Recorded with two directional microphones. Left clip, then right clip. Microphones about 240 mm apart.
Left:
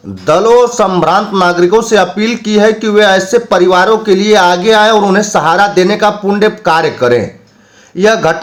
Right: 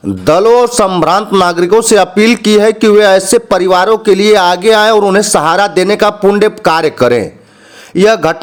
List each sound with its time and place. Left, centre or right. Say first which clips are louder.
0.3 s a man's voice: even; right